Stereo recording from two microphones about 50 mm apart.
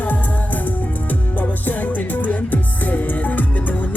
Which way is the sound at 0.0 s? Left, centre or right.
Left.